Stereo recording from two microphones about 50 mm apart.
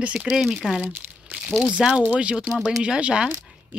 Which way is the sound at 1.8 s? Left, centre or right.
Centre.